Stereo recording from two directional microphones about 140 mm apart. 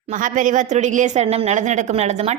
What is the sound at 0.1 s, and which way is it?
Speech, 70° right (ahead or behind).